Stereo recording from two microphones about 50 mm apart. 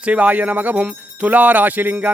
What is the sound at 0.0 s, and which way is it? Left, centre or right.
Music, right.